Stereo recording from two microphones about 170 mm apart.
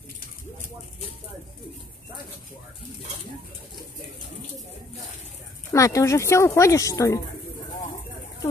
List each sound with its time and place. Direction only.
5.7 s speech: 20° left (ahead or behind)